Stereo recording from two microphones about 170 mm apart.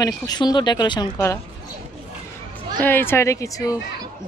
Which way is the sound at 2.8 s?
10° left (ahead or behind).